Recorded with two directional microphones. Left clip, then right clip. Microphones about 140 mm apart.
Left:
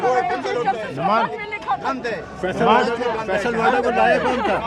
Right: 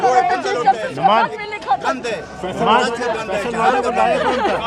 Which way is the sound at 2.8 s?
10° right (ahead or behind).